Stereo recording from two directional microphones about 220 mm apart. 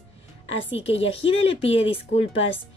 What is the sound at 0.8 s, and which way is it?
Speech, 25° left (ahead or behind).